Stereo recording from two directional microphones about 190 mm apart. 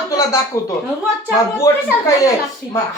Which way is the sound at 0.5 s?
15° left (ahead or behind).